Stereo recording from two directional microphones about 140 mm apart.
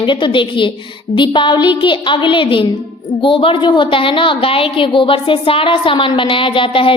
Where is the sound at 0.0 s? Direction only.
35° left (ahead or behind).